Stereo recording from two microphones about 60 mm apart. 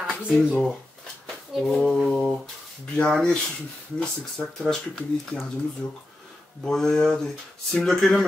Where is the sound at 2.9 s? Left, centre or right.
Centre.